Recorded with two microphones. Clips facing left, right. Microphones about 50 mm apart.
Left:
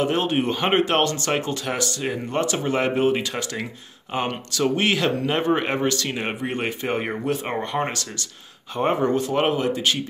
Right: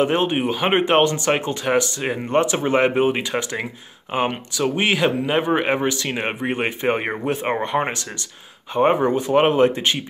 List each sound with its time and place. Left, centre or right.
0.0 s speech: right
0.4 s speech: centre
0.7 s speech: right
9.6 s speech: right